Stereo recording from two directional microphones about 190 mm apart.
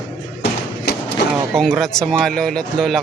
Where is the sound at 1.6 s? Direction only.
Centre (ahead or behind).